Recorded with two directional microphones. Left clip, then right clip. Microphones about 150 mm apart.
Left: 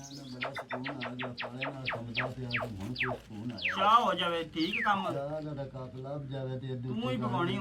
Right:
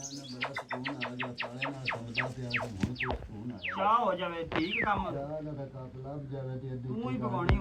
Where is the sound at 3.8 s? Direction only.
15° left (ahead or behind).